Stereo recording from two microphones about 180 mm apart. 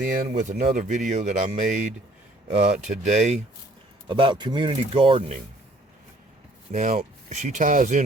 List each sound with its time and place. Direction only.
0.0 s speech: 45° right (ahead or behind)
4.1 s speech: 25° right (ahead or behind)
6.7 s speech: 40° right (ahead or behind)